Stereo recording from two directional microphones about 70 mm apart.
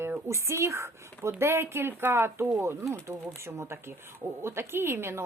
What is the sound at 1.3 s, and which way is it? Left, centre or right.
A woman's voice, right.